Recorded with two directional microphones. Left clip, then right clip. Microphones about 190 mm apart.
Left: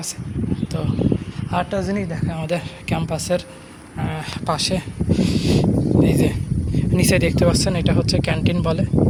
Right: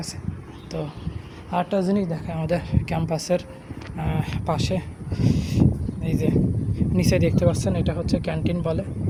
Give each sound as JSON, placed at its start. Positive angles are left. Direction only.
{"t": 1.7, "sound": "speech", "side_deg": -25}